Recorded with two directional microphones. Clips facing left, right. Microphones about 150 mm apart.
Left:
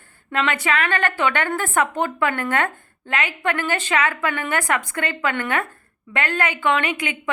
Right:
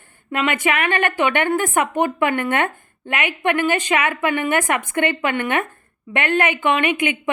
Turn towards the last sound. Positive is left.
turn(degrees=-20)  # may be behind; listen again after turning